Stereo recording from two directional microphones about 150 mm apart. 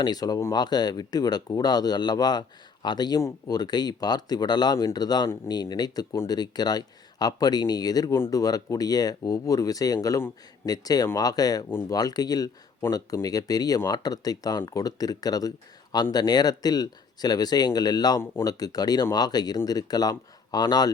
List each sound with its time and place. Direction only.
0.0 s speech: 25° left (ahead or behind)